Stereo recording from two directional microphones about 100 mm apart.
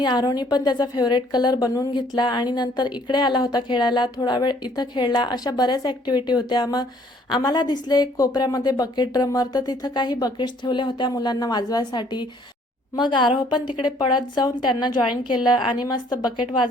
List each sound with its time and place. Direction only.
0.0 s a woman's voice: 45° left (ahead or behind)
1.9 s a woman's voice: 50° left (ahead or behind)